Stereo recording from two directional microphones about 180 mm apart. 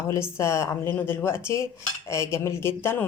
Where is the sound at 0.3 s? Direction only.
15° left (ahead or behind).